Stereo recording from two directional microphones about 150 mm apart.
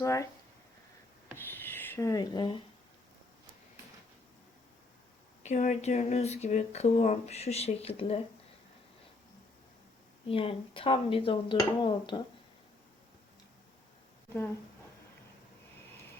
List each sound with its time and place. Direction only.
0.0 s speech: 20° left (ahead or behind)
1.4 s writing: 15° left (ahead or behind); by 2.6 s 30° left (ahead or behind)
5.4 s speech: 50° left (ahead or behind)
10.2 s speech: 35° left (ahead or behind)